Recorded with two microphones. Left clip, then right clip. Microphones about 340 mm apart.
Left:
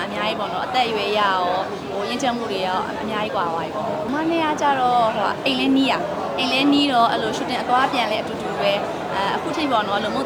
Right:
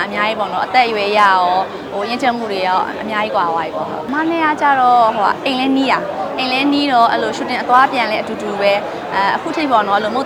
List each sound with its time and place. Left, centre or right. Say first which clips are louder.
0.2 s speech: right 6 dB; centre